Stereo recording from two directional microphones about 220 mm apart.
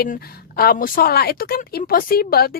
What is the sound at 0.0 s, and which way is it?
A woman's voice, 45° left (ahead or behind).